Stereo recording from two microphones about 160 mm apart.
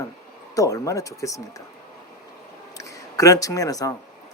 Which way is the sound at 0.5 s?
20° left (ahead or behind).